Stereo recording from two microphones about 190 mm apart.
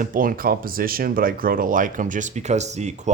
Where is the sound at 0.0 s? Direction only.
45° right (ahead or behind).